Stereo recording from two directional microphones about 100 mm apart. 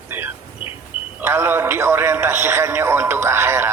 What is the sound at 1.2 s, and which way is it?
A man's voice, 25° right (ahead or behind).